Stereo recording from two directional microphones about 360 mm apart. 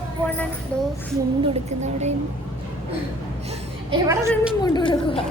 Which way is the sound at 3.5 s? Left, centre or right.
Centre.